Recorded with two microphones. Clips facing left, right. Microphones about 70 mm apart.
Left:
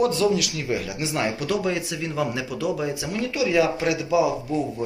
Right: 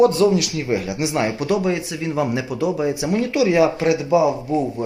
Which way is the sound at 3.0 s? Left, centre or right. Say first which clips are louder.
Right 7 dB; right.